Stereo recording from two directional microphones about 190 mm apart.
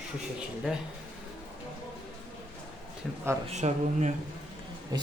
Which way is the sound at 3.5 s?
35° right (ahead or behind).